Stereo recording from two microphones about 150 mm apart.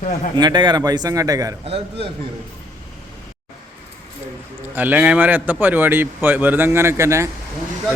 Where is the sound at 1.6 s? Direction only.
40° right (ahead or behind).